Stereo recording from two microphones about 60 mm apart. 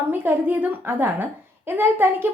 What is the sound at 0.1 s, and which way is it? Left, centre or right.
A woman's voice, right.